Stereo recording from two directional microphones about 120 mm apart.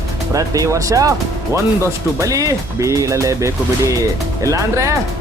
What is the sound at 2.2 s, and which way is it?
Speech, 30° right (ahead or behind).